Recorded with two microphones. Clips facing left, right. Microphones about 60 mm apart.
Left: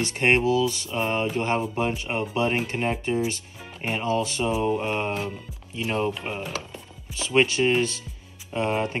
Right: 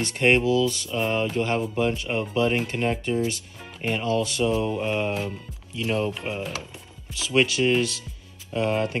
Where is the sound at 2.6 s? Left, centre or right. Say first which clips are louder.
Right 1 dB; left.